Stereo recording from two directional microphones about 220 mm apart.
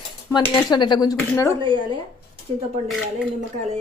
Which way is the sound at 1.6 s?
20° right (ahead or behind).